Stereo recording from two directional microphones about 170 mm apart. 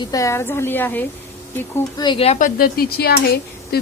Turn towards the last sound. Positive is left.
turn(degrees=65)  # may be behind; listen again after turning